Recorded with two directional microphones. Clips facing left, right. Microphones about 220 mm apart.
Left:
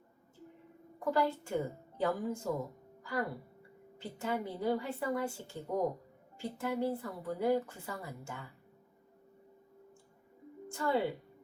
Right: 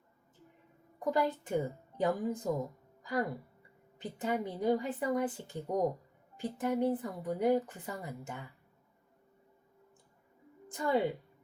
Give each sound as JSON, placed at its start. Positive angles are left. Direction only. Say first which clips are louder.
{"t": 0.9, "sound": "a woman's voice", "louder": "even", "side_deg": -20}
{"t": 3.0, "sound": "music", "louder": "right 2 dB", "side_deg": -20}
{"t": 3.9, "sound": "a woman's voice", "louder": "right 2 dB", "side_deg": -15}
{"t": 10.7, "sound": "speech", "louder": "right 1 dB", "side_deg": -15}